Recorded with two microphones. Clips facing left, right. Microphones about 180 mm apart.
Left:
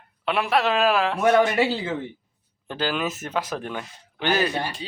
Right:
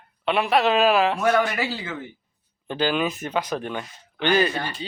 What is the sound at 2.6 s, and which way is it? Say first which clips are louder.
Speech: right 3 dB; centre (ahead or behind).